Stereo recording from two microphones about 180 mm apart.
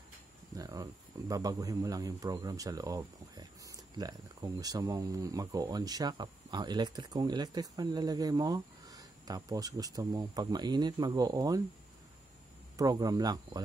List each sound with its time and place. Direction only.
0.6 s speech: 20° right (ahead or behind)
12.7 s speech: 20° right (ahead or behind)